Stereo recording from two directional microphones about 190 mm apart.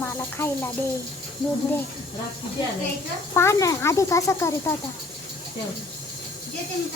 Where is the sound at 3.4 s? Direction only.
15° left (ahead or behind).